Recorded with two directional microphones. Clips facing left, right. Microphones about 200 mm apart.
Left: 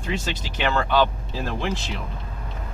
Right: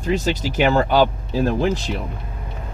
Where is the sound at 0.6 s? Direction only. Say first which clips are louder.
Right 5 dB; 40° right (ahead or behind).